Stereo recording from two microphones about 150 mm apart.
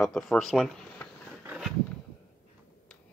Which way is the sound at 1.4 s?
5° right (ahead or behind).